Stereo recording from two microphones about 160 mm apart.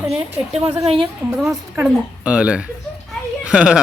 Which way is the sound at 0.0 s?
5° right (ahead or behind).